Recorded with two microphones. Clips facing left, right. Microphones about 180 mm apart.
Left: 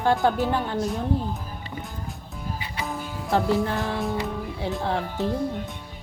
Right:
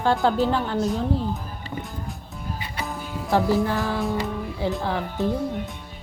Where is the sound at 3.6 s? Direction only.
20° left (ahead or behind).